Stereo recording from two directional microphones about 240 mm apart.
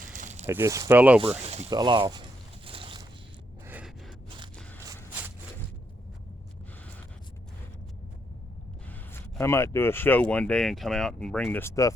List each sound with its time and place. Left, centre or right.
0.0 s a sound: right
0.4 s speech: centre
1.7 s speech: centre
2.6 s boat: right
3.7 s a sound: centre
8.9 s speech: centre